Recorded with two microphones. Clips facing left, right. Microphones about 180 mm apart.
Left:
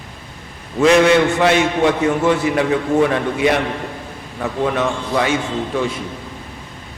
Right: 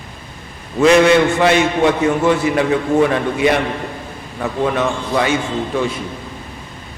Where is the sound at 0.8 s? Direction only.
15° right (ahead or behind).